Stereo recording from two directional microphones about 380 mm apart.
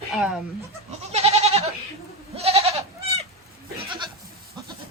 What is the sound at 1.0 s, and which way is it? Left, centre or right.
Goat, centre.